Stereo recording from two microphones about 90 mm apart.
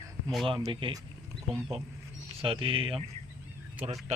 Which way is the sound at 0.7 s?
70° right (ahead or behind).